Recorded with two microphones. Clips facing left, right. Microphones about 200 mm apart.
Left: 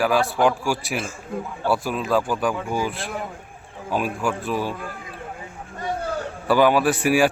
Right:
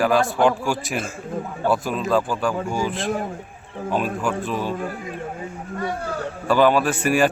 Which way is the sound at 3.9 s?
10° left (ahead or behind).